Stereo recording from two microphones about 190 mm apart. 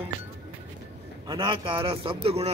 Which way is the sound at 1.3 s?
25° right (ahead or behind).